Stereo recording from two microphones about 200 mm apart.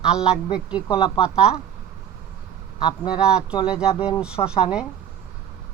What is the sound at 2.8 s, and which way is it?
Speech, 20° left (ahead or behind).